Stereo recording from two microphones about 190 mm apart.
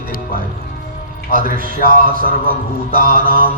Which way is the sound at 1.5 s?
50° right (ahead or behind).